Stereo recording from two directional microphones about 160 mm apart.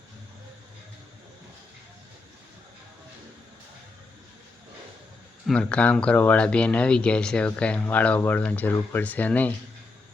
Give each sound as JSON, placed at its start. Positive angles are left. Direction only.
{"t": 5.5, "sound": "speech", "side_deg": 10}